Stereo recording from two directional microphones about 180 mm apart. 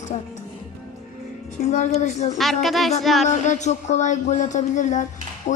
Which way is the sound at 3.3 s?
40° left (ahead or behind).